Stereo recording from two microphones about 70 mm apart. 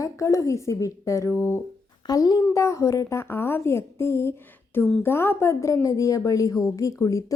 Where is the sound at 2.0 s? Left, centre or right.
Left.